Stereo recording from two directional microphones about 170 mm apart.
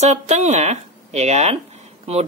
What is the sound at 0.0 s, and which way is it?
A woman's voice, 40° right (ahead or behind).